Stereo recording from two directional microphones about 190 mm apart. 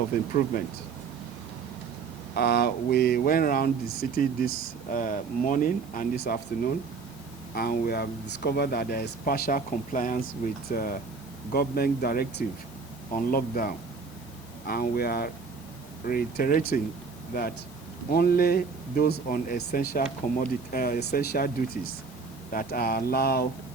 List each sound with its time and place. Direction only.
0.1 s speech: 45° left (ahead or behind)
2.3 s speech: 55° left (ahead or behind)
7.5 s speech: 50° left (ahead or behind)
18.1 s speech: 55° left (ahead or behind)
22.5 s speech: 50° left (ahead or behind)